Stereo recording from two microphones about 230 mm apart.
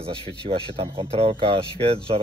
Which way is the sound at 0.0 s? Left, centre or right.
Right.